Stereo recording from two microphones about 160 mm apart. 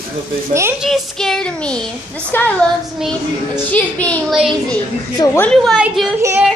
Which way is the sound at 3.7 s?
10° left (ahead or behind).